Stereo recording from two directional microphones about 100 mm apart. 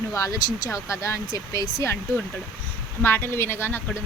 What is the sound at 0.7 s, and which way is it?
Speech, 30° left (ahead or behind).